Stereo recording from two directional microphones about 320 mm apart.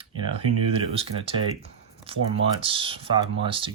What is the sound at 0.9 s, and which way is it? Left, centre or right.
Speech, centre.